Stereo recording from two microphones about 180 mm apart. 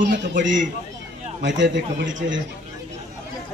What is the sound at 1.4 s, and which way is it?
Speech, 85° right.